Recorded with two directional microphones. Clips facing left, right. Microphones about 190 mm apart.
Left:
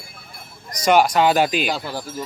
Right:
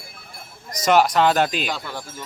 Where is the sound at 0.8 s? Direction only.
Centre (ahead or behind).